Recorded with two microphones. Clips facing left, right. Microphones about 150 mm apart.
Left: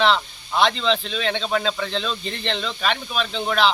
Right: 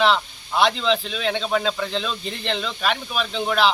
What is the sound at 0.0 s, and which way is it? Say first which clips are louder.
Speech: even; 5° right (ahead or behind).